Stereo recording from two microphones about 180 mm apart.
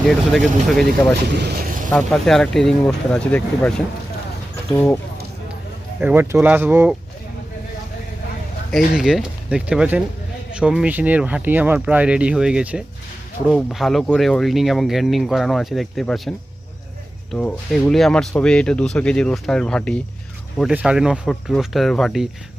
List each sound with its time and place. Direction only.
0.0 s speech: centre (ahead or behind)
1.4 s speech: 60° right (ahead or behind)
1.9 s speech: 5° left (ahead or behind)
6.0 s speech: 10° right (ahead or behind)
9.0 s speech: 5° right (ahead or behind)
17.3 s speech: 5° left (ahead or behind)